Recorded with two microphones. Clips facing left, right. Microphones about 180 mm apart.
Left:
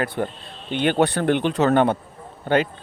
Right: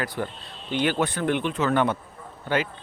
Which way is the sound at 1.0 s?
65° left (ahead or behind).